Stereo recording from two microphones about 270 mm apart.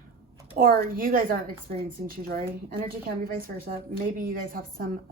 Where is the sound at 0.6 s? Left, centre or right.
Right.